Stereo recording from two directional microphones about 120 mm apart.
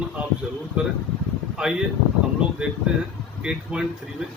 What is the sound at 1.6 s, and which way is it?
Speech, 5° right (ahead or behind).